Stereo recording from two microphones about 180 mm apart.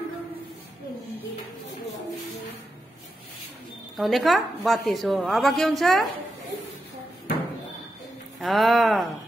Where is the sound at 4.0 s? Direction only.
Centre (ahead or behind).